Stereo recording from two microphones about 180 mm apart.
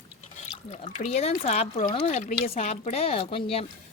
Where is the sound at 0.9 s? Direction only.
40° left (ahead or behind).